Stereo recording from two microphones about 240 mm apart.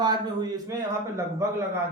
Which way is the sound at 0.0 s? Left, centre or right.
Centre.